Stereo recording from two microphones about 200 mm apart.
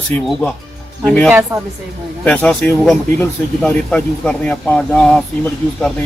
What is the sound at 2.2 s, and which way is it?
Speech, 5° left (ahead or behind).